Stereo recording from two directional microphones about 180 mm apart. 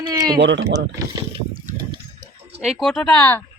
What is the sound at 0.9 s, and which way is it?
Speech, 20° right (ahead or behind).